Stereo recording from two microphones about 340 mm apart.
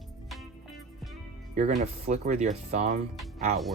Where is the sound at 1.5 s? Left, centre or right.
Centre.